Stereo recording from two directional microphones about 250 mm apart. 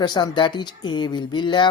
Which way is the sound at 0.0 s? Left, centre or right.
Centre.